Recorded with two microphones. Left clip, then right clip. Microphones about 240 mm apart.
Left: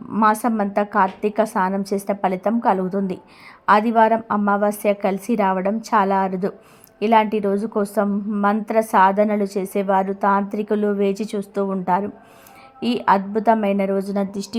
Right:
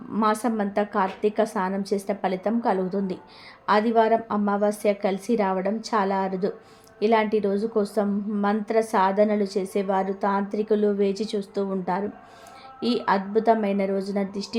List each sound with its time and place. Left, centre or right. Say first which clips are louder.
0.1 s a woman's voice: left 6 dB; centre